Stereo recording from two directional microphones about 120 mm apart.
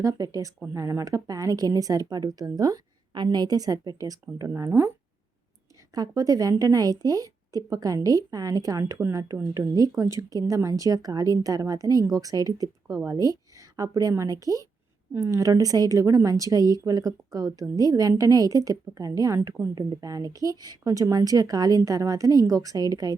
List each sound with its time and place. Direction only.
0.0 s a woman's voice: 30° right (ahead or behind)
5.9 s a woman's voice: 30° right (ahead or behind)